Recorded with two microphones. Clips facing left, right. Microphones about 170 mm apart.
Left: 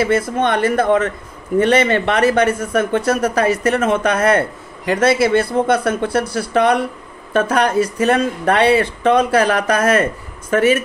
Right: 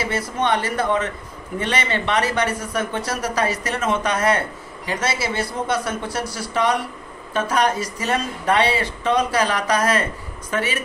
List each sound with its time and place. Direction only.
0.0 s speech: 55° left (ahead or behind)